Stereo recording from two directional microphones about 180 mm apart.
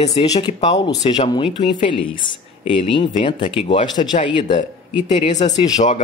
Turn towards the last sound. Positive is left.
turn(degrees=40)  # may be behind; listen again after turning